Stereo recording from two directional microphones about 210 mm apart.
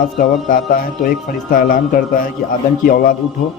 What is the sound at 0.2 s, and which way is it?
A man's voice, 45° left (ahead or behind).